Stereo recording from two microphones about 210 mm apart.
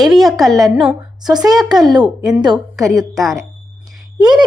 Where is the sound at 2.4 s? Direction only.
20° right (ahead or behind).